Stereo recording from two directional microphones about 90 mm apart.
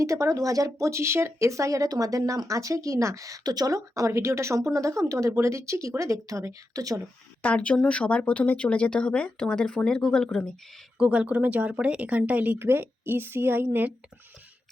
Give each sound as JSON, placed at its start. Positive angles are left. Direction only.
{"t": 0.0, "sound": "speech", "side_deg": -35}
{"t": 7.4, "sound": "speech", "side_deg": 15}
{"t": 10.9, "sound": "speech", "side_deg": -10}